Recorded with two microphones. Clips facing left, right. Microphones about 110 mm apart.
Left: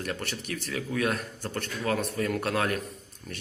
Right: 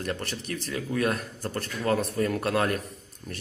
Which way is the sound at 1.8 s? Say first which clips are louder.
Right 3 dB; centre (ahead or behind).